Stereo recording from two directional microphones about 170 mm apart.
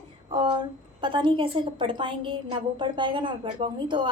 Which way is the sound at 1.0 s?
30° right (ahead or behind).